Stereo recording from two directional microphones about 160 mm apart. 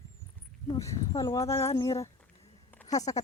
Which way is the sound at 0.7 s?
20° left (ahead or behind).